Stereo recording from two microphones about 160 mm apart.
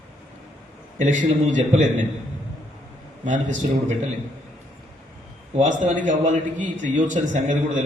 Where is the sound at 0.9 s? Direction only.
50° right (ahead or behind).